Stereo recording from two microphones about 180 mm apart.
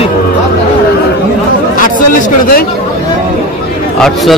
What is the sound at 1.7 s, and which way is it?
Speech, 50° left (ahead or behind).